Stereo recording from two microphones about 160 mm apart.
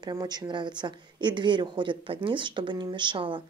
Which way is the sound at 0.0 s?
25° right (ahead or behind).